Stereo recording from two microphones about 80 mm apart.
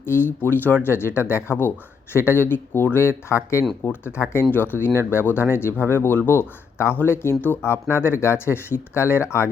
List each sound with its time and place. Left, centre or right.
0.0 s speech: left